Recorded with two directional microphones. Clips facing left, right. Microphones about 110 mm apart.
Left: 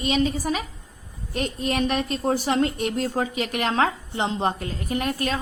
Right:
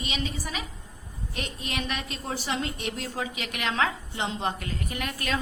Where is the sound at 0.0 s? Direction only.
45° left (ahead or behind).